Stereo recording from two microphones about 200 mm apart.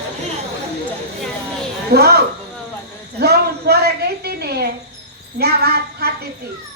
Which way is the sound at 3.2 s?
55° right (ahead or behind).